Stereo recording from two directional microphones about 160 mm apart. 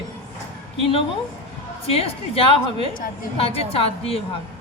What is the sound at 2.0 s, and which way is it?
A woman's voice, 35° left (ahead or behind).